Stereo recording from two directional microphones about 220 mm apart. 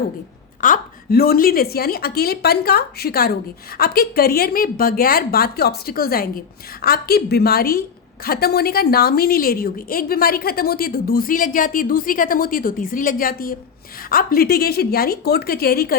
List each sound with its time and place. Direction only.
0.6 s a woman's voice: 40° left (ahead or behind)